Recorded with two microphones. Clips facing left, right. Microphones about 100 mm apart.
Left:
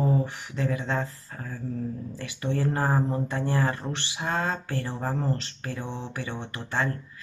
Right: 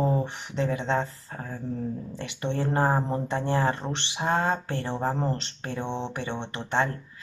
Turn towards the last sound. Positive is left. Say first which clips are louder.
# right 3 dB
turn(degrees=-20)  # may be behind; listen again after turning